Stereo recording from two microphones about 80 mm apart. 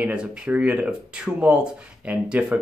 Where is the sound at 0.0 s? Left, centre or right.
Centre.